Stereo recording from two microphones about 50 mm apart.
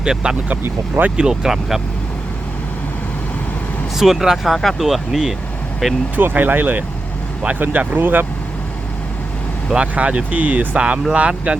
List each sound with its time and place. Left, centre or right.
0.0 s speech: centre
3.9 s speech: centre
6.1 s speech: right
9.7 s speech: right